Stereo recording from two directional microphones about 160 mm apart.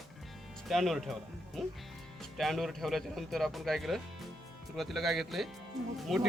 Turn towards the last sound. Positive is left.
turn(degrees=0)  # may be behind; listen again after turning